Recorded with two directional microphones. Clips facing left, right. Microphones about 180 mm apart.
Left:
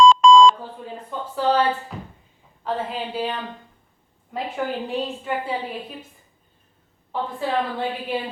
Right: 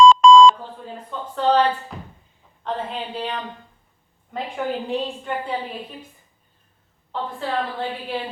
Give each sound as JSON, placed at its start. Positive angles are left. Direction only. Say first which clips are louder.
{"t": 0.0, "sound": "beep", "louder": "right 2 dB", "side_deg": -60}
{"t": 1.2, "sound": "a sound", "louder": "right 2 dB", "side_deg": 5}
{"t": 2.6, "sound": "a woman's voice", "louder": "left 1 dB", "side_deg": 5}
{"t": 7.1, "sound": "a woman's voice", "louder": "left 2 dB", "side_deg": 10}